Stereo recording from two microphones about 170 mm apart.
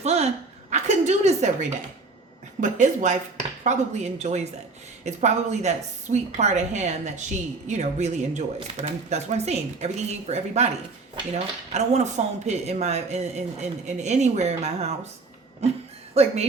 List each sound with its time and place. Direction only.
0.0 s speech: 40° right (ahead or behind)
0.7 s a sound: 40° right (ahead or behind)
2.6 s a woman's voice: 50° right (ahead or behind)
11.7 s speech: 40° right (ahead or behind)